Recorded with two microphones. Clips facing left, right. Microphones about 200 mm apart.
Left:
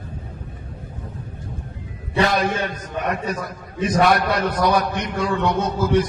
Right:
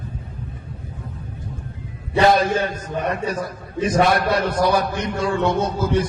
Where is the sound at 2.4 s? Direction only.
30° right (ahead or behind).